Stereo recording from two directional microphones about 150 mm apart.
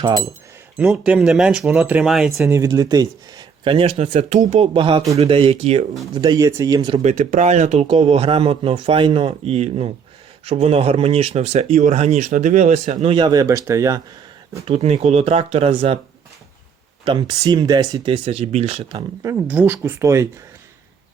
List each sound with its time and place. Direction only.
0.8 s speech: 5° right (ahead or behind)
2.5 s speech: 20° right (ahead or behind); by 5.8 s 40° right (ahead or behind)
6.1 s speech: 25° right (ahead or behind)
7.0 s a man's voice: 55° right (ahead or behind)
13.1 s speech: 30° right (ahead or behind)
14.7 s a man's voice: 40° right (ahead or behind)
17.1 s speech: 30° right (ahead or behind)
19.2 s speech: 15° right (ahead or behind)